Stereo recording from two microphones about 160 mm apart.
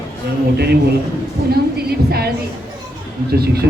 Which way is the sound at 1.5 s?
80° right.